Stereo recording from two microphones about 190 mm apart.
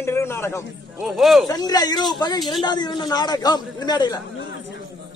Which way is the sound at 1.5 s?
20° left (ahead or behind).